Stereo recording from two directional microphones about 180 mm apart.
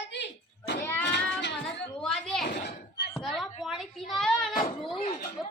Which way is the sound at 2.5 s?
65° left (ahead or behind).